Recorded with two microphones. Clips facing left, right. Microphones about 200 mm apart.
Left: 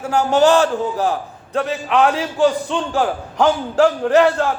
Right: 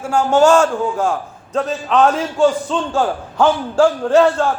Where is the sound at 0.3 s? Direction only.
35° left (ahead or behind).